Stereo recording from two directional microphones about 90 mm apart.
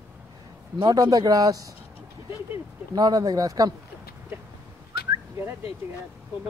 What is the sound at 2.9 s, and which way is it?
Speech, 45° right (ahead or behind).